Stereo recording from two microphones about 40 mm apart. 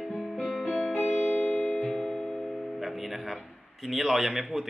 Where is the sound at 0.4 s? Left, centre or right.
Centre.